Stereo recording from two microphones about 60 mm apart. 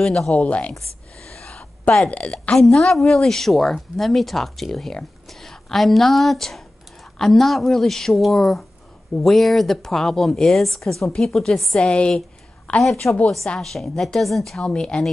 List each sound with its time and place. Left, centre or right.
0.0 s speech: centre
0.3 s speech: left
1.3 s a sound: centre
2.0 s speech: left
2.5 s a woman's voice: centre
13.6 s a woman's voice: centre
14.6 s speech: centre